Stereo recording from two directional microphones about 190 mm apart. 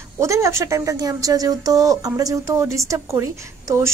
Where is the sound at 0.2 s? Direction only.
15° right (ahead or behind).